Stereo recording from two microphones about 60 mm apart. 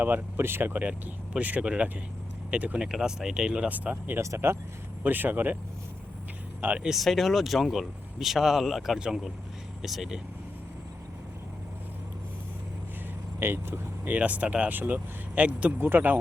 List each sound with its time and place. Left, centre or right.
0.0 s speech: right
2.8 s speech: centre
3.7 s speech: right
4.2 s speech: right
5.0 s speech: right
6.9 s speech: centre
13.4 s speech: right
14.1 s speech: right
15.8 s speech: right